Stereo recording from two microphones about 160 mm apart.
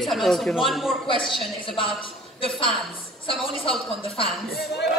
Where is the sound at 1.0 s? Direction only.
30° left (ahead or behind).